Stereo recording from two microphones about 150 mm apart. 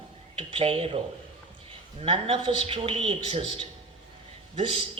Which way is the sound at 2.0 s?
40° right (ahead or behind).